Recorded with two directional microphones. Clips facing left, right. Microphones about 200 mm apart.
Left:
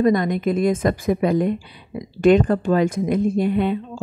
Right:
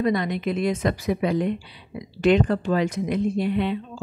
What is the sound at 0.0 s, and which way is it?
A woman's voice, 45° left (ahead or behind).